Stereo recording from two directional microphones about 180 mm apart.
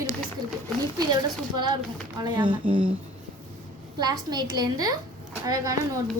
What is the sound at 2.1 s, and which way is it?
Speech, 25° right (ahead or behind).